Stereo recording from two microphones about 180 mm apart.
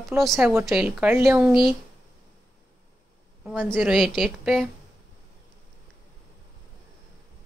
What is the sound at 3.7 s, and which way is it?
Speech, centre (ahead or behind).